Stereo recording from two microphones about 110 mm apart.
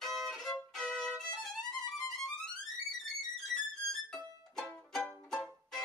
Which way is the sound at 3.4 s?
5° left (ahead or behind).